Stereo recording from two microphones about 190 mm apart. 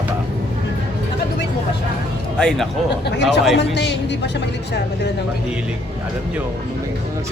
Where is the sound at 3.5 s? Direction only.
65° left (ahead or behind).